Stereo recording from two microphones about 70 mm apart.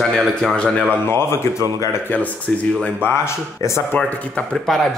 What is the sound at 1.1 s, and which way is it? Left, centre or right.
Speech, left.